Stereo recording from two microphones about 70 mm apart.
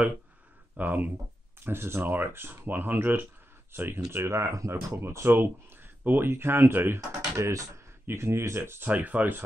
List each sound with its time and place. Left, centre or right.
0.7 s speech: right
1.6 s speech: right
7.3 s speech: right
8.9 s speech: right